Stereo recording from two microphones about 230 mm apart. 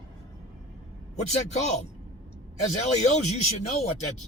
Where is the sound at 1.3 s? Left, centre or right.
Left.